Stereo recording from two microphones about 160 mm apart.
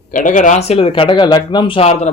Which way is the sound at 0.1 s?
55° left (ahead or behind).